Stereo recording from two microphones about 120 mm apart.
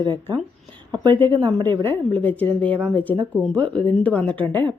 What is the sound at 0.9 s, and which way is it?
Speech, 40° right (ahead or behind).